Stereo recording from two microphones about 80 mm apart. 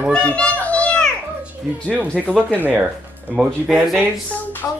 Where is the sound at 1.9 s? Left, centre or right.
Centre.